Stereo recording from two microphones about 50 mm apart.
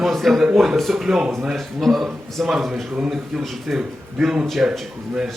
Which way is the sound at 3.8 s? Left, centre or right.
Centre.